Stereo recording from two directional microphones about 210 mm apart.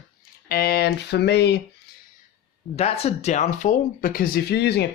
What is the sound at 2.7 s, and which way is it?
Speech, 30° left (ahead or behind).